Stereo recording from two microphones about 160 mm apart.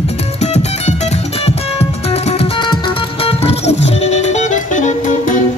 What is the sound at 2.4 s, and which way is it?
Music, 30° left (ahead or behind).